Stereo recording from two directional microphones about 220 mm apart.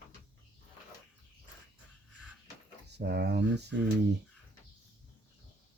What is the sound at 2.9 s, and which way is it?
Speech, 50° right (ahead or behind).